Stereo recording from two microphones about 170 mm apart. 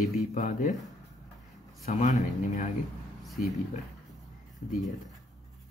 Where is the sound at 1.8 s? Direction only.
45° left (ahead or behind).